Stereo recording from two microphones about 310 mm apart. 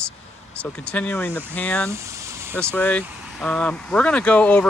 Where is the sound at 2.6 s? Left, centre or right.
Centre.